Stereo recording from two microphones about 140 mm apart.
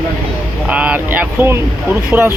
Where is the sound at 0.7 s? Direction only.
10° right (ahead or behind).